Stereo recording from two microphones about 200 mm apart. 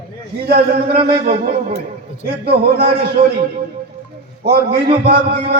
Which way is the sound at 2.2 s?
50° right (ahead or behind).